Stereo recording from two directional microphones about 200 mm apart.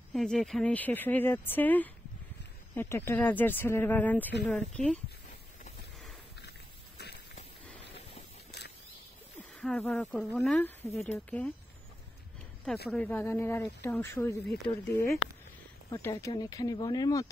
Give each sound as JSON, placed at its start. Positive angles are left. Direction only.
{"t": 0.1, "sound": "speech", "side_deg": 0}
{"t": 8.5, "sound": "a sound", "side_deg": 55}
{"t": 9.6, "sound": "speech", "side_deg": 5}
{"t": 12.9, "sound": "speech", "side_deg": 10}
{"t": 15.9, "sound": "speech", "side_deg": 15}